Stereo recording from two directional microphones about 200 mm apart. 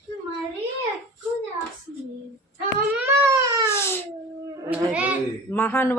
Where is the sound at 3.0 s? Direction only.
15° right (ahead or behind).